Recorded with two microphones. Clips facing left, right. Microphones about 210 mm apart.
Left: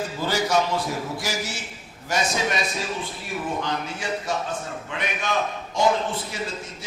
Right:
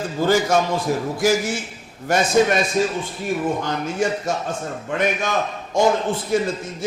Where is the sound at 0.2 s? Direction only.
50° right (ahead or behind).